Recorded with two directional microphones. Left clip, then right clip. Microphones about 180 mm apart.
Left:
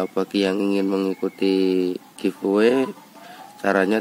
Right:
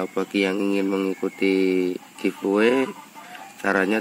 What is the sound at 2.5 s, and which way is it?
Speech, 20° left (ahead or behind).